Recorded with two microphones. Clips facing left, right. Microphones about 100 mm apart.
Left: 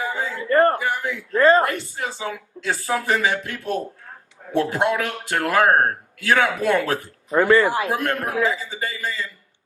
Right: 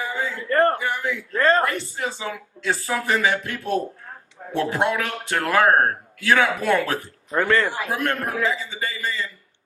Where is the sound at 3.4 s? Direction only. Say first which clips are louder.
Right 1 dB; 40° right (ahead or behind).